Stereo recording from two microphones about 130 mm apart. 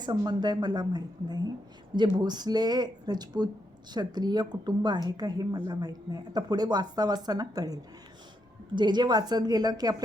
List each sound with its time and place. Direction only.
0.0 s speech: 35° right (ahead or behind)